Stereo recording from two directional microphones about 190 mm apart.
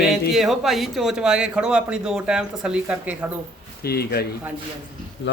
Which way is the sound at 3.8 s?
55° left (ahead or behind).